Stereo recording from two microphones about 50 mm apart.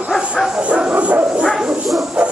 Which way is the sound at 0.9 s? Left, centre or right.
Right.